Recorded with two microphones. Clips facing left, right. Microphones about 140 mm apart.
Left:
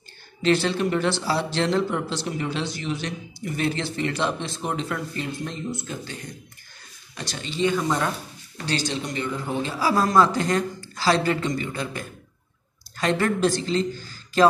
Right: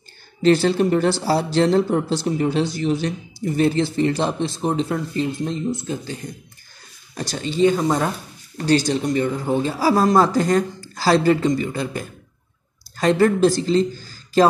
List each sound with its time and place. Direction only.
0.4 s speech: 40° right (ahead or behind)
7.2 s speech: 40° right (ahead or behind)